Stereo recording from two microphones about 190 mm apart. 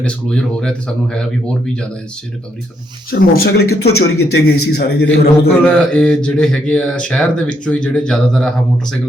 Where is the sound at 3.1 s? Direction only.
55° left (ahead or behind).